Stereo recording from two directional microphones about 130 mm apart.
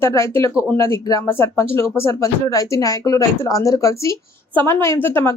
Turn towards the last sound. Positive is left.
turn(degrees=15)  # may be behind; listen again after turning